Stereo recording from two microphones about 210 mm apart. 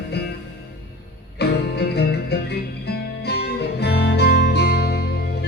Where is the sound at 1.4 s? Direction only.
50° left (ahead or behind).